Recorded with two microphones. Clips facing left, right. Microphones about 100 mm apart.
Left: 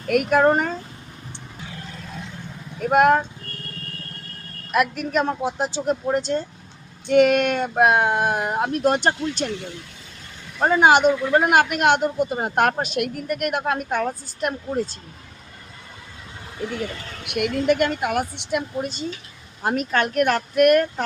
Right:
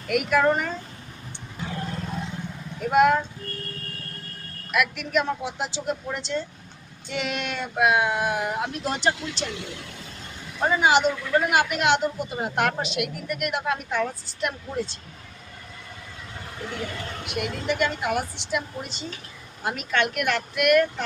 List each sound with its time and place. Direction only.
0.1 s speech: 45° left (ahead or behind)
2.8 s speech: 50° left (ahead or behind)
4.7 s speech: 40° left (ahead or behind)
10.6 s speech: 55° left (ahead or behind)
17.2 s a woman's voice: 60° left (ahead or behind); by 20.8 s 40° left (ahead or behind)